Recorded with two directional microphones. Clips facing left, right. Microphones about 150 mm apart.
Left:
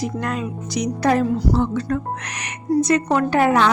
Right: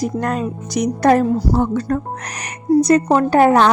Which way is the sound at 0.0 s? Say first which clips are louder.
Right 4 dB; 40° right (ahead or behind).